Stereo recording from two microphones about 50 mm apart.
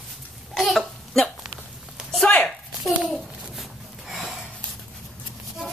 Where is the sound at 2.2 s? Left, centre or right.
Centre.